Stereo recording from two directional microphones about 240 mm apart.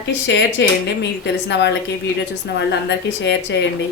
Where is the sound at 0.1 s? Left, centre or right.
Left.